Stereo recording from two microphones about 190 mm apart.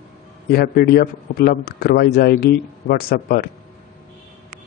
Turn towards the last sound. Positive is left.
turn(degrees=50)  # may be behind; listen again after turning